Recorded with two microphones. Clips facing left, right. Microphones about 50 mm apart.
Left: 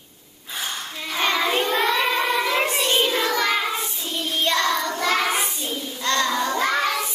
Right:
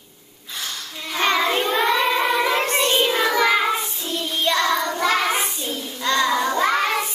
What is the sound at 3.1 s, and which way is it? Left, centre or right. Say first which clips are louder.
Child singing: right 3 dB; centre.